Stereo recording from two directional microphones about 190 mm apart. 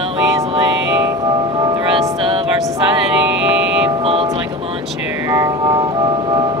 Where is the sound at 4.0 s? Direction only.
30° right (ahead or behind).